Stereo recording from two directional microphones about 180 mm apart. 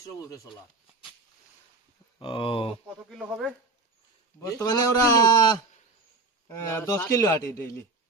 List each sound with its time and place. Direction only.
0.2 s a man's voice: 20° left (ahead or behind)
2.1 s a man's voice: 30° left (ahead or behind)
3.1 s speech: 5° right (ahead or behind)
4.5 s a man's voice: 20° left (ahead or behind)